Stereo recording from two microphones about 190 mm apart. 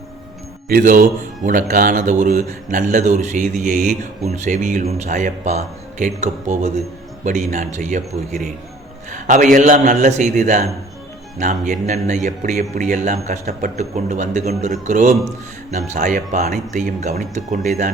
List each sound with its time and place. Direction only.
0.7 s a man's voice: 45° right (ahead or behind)